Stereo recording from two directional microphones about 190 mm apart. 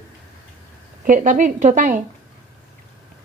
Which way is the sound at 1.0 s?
45° right (ahead or behind).